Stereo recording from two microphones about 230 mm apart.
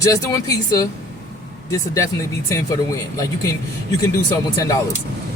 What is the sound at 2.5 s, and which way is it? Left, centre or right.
Speech, centre.